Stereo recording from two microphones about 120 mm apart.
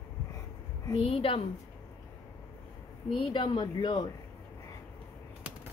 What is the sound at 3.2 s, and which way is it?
Speech, 40° left (ahead or behind).